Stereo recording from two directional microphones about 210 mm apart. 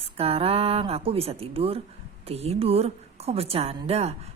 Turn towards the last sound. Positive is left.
turn(degrees=-30)  # may be behind; listen again after turning